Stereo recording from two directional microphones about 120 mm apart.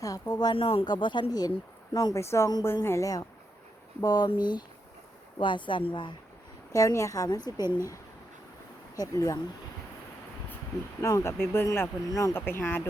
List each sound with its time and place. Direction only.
0.0 s speech: 30° left (ahead or behind)
2.1 s speech: 25° left (ahead or behind); by 6.1 s 40° left (ahead or behind)
6.7 s speech: 25° left (ahead or behind)
9.0 s speech: 30° left (ahead or behind)
11.0 s speech: 25° left (ahead or behind)